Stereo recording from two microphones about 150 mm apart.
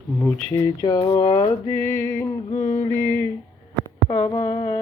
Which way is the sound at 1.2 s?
30° left (ahead or behind).